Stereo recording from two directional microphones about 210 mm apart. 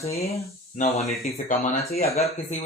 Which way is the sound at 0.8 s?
30° left (ahead or behind).